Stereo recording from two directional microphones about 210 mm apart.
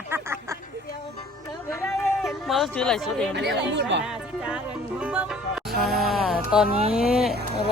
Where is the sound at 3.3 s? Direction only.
55° right (ahead or behind).